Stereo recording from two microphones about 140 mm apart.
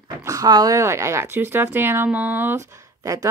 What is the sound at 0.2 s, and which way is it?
A woman's voice, 25° right (ahead or behind).